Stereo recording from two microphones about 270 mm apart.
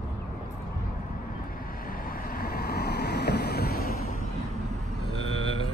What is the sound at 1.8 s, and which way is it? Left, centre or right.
Vehicle, left.